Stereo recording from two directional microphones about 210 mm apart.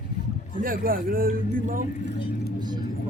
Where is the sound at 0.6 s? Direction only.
40° right (ahead or behind).